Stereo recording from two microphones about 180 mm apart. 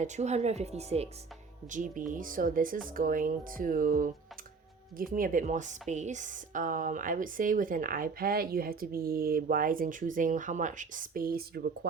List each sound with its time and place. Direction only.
0.0 s speech: 40° right (ahead or behind)
1.7 s speech: 45° right (ahead or behind)